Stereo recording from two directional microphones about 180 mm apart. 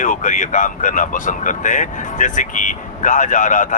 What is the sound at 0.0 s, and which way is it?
Speech, 45° left (ahead or behind).